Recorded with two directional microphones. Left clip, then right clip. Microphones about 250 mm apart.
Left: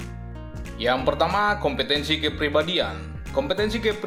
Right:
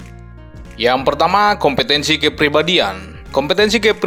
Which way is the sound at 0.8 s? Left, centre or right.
Right.